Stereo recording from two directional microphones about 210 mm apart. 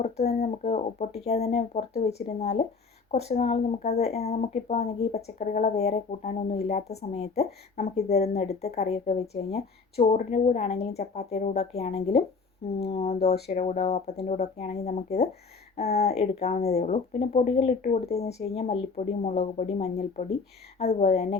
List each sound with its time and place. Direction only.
0.3 s speech: 30° left (ahead or behind)
19.4 s speech: 40° left (ahead or behind)